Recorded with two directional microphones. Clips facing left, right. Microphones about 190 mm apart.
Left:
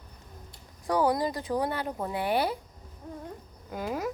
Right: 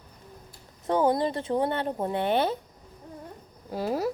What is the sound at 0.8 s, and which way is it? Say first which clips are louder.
Speech: right 2 dB; 25° right (ahead or behind).